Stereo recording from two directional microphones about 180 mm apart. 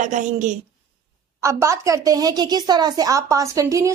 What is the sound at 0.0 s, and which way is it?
Speech, 45° right (ahead or behind).